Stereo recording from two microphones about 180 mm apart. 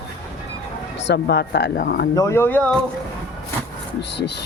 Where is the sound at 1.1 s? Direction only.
70° left (ahead or behind).